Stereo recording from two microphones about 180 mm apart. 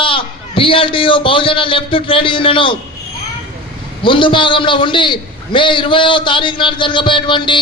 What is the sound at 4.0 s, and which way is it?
A man's voice, 25° left (ahead or behind).